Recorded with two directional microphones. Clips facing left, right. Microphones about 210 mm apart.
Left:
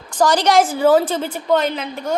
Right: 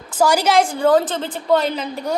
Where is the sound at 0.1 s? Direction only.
10° right (ahead or behind); by 1.4 s 10° left (ahead or behind).